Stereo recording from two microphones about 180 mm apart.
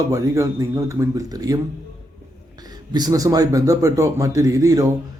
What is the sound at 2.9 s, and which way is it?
A man's voice, 20° right (ahead or behind).